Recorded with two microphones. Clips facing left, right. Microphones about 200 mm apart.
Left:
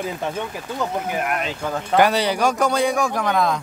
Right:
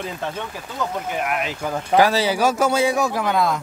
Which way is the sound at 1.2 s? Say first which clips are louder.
Even; 5° right (ahead or behind).